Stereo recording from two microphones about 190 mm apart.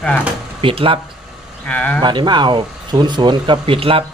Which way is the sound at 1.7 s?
5° left (ahead or behind).